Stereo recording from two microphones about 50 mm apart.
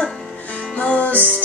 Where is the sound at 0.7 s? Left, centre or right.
Left.